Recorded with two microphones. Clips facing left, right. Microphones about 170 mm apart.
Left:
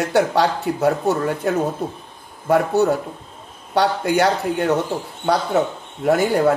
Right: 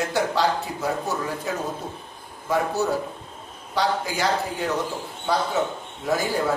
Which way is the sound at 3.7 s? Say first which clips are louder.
Left 6 dB; 65° left (ahead or behind).